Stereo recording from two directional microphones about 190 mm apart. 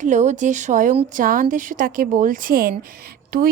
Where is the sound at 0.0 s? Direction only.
40° right (ahead or behind).